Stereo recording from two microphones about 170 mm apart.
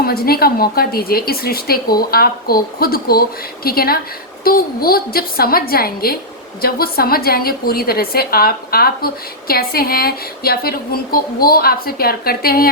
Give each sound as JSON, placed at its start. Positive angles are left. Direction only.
{"t": 0.0, "sound": "a woman's voice", "side_deg": 65}